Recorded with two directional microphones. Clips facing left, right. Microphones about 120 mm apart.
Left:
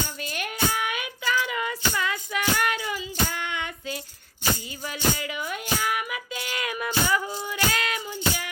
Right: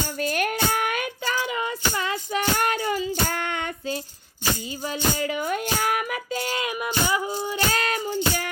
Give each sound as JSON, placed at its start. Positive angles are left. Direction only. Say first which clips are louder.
{"t": 0.2, "sound": "child singing", "louder": "right 7 dB", "side_deg": -45}
{"t": 4.9, "sound": "music", "louder": "right 3 dB", "side_deg": -35}
{"t": 6.6, "sound": "child singing", "louder": "left 3 dB", "side_deg": -20}